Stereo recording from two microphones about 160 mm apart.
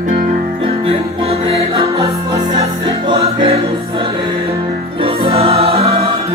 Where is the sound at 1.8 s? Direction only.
20° right (ahead or behind).